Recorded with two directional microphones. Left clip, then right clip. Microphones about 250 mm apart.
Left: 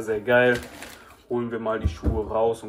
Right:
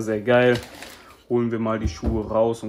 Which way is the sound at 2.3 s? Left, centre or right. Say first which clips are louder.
Right 2 dB; right.